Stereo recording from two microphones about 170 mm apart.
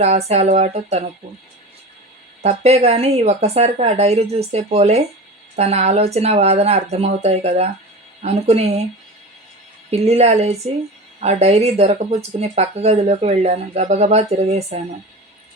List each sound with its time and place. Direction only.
0.0 s speech: 40° right (ahead or behind)
2.4 s speech: 40° right (ahead or behind)
9.9 s speech: 40° right (ahead or behind)